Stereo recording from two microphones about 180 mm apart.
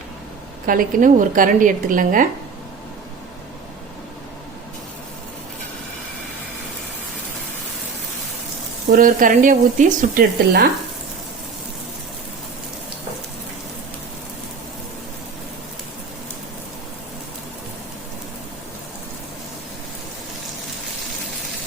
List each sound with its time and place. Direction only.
0.7 s speech: 50° right (ahead or behind)
8.9 s speech: 50° right (ahead or behind)